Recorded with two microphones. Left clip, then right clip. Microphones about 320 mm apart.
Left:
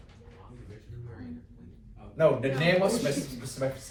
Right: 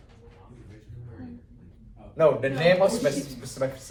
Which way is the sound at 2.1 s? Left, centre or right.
Right.